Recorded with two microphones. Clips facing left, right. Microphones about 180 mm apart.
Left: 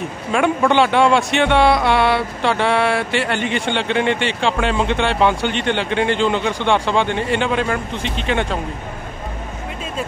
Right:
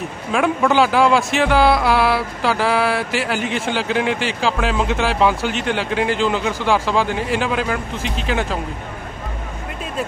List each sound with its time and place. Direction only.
0.3 s a man's voice: centre (ahead or behind)